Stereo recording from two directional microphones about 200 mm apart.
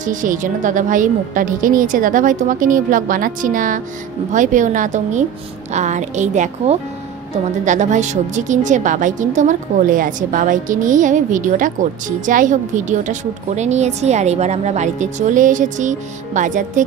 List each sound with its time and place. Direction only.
0.0 s a woman's voice: 40° right (ahead or behind)